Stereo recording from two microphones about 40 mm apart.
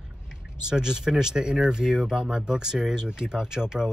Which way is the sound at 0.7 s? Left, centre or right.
Centre.